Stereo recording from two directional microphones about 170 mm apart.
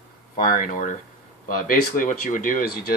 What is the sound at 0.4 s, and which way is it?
Speech, 55° left (ahead or behind).